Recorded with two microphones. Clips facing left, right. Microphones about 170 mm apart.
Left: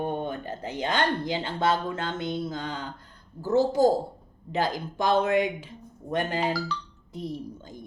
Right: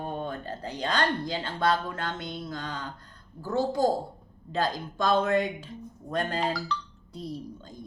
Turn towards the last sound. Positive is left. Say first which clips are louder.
# left 2 dB
turn(degrees=20)  # may be behind; listen again after turning